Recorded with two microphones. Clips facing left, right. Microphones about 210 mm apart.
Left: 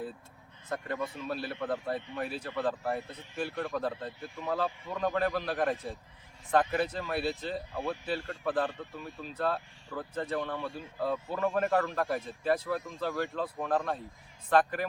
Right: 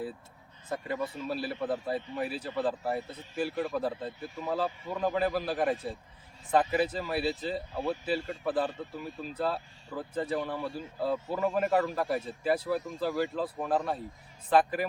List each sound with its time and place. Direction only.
0.7 s a man's voice: 5° right (ahead or behind)